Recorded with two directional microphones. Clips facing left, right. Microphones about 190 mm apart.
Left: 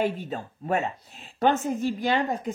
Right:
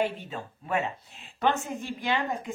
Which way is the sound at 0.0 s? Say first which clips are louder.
Left 3 dB; 40° left (ahead or behind).